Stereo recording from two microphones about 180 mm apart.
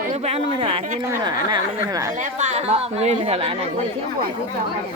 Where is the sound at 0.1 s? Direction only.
35° right (ahead or behind).